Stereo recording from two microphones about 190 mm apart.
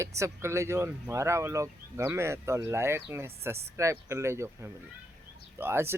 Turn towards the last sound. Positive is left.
turn(degrees=-10)  # may be behind; listen again after turning